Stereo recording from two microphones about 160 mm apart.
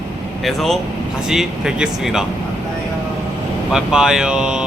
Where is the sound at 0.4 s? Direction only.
Centre (ahead or behind).